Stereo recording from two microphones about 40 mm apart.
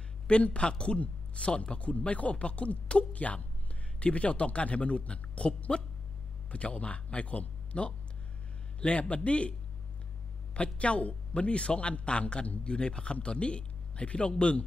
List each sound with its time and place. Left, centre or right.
0.3 s speech: left